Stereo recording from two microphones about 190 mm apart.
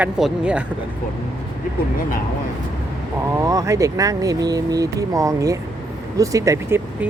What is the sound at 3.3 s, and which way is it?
Speech, 15° right (ahead or behind).